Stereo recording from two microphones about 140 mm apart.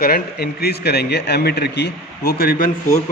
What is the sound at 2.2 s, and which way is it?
Speech, 90° left.